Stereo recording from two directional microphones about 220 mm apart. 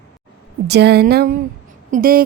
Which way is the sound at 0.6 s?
50° right (ahead or behind).